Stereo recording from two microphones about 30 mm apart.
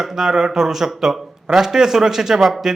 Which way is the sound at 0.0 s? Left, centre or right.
Centre.